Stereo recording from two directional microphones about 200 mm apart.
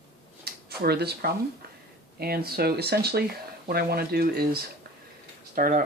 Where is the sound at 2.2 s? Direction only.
50° right (ahead or behind).